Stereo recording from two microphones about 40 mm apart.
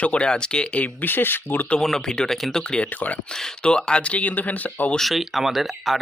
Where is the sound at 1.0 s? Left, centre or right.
Left.